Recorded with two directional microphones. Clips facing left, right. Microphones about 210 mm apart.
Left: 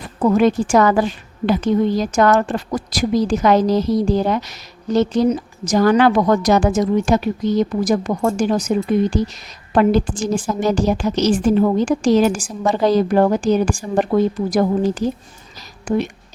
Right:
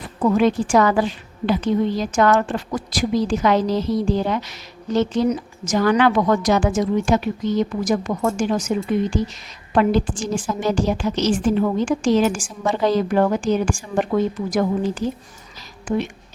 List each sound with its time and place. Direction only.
0.2 s a woman's voice: 45° left (ahead or behind)